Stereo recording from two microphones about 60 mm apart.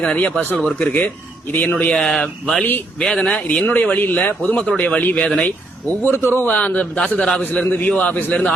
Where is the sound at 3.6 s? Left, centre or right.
Left.